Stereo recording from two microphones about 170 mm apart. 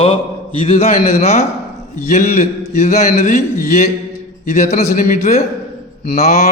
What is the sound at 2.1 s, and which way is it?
Speech, 55° left (ahead or behind).